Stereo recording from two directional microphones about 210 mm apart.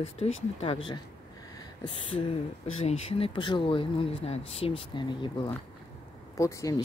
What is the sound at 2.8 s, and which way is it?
Speech, 25° left (ahead or behind).